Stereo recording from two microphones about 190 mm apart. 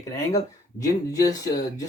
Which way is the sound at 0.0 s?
20° left (ahead or behind).